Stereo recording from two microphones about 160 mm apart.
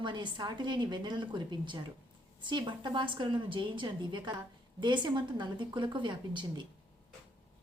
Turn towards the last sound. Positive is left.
turn(degrees=-30)  # may be behind; listen again after turning